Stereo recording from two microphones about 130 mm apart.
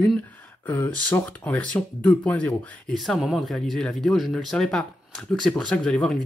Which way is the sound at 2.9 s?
Centre (ahead or behind).